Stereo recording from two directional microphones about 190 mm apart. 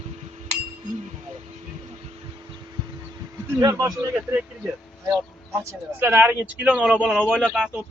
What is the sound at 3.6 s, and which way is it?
Speech, 20° right (ahead or behind).